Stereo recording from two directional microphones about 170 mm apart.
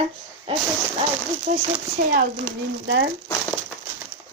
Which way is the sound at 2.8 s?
90° right.